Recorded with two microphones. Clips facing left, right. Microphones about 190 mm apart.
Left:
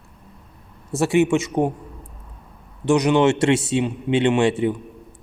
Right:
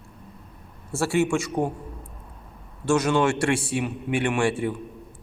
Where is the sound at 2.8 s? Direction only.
20° left (ahead or behind).